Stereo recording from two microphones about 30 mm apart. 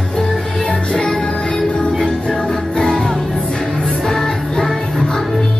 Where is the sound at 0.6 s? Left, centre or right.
Left.